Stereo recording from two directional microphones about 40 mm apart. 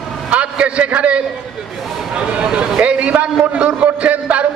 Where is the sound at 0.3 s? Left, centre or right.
Right.